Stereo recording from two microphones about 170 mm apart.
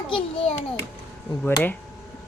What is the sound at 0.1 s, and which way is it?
Speech, 30° left (ahead or behind).